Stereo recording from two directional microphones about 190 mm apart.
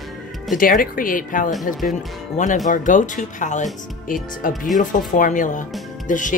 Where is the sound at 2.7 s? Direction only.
40° left (ahead or behind).